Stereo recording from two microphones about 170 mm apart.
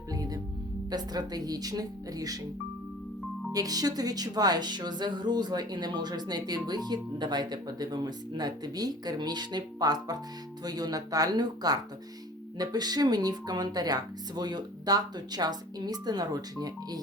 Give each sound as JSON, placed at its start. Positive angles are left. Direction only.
{"t": 0.1, "sound": "music", "side_deg": -20}
{"t": 0.9, "sound": "speech", "side_deg": -25}
{"t": 3.5, "sound": "speech", "side_deg": -20}